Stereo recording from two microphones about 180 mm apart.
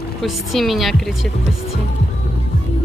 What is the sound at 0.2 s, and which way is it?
Speech, centre (ahead or behind).